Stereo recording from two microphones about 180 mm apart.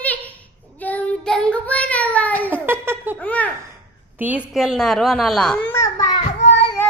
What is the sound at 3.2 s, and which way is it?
Child singing, 10° left (ahead or behind).